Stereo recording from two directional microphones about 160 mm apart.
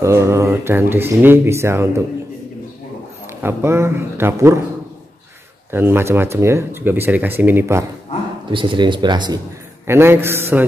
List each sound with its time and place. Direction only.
0.0 s speech: 15° right (ahead or behind)
3.3 s speech: 15° right (ahead or behind)
5.7 s speech: 15° right (ahead or behind)
8.5 s speech: 30° right (ahead or behind)
9.8 s speech: 15° right (ahead or behind)